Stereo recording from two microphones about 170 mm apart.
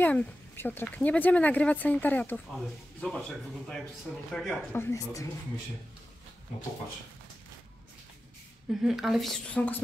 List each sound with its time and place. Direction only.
0.0 s a woman's voice: 10° left (ahead or behind)
4.7 s speech: 15° left (ahead or behind)
8.8 s a woman's voice: centre (ahead or behind)